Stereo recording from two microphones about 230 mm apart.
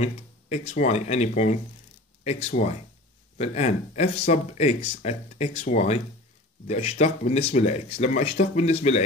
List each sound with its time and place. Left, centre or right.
0.0 s speech: left